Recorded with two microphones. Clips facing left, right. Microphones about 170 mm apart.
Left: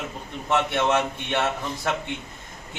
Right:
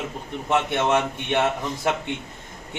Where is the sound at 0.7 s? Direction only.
15° right (ahead or behind).